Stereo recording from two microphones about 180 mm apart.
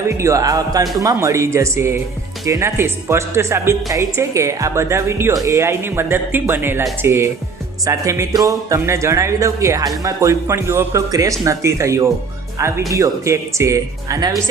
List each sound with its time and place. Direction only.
0.2 s speech: 15° right (ahead or behind)